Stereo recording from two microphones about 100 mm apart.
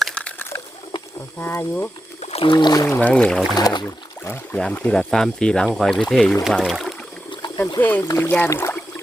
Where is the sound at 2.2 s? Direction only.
90° left.